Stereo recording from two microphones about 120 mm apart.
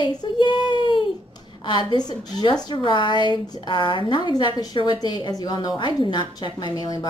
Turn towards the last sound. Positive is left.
turn(degrees=35)  # may be behind; listen again after turning